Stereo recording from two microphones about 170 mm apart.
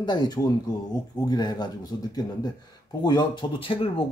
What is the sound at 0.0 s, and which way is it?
Speech, 25° left (ahead or behind).